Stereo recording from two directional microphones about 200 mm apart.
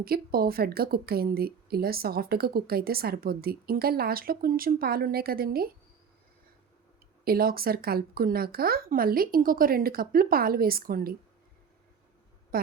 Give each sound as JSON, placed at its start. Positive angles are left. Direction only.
{"t": 0.0, "sound": "a woman's voice", "side_deg": -50}
{"t": 7.3, "sound": "a woman's voice", "side_deg": -45}